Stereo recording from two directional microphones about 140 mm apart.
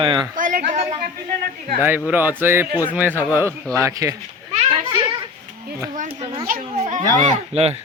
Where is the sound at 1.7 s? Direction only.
15° right (ahead or behind).